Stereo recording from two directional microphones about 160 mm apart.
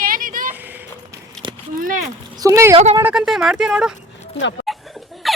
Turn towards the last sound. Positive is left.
turn(degrees=0)  # may be behind; listen again after turning